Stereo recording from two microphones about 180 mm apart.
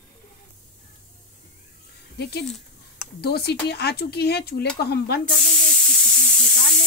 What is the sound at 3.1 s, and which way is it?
Speech, 65° left (ahead or behind).